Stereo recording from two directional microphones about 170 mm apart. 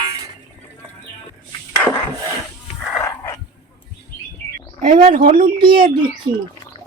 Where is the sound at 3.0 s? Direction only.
20° left (ahead or behind).